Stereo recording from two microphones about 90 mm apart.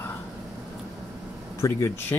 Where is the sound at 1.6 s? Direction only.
35° left (ahead or behind).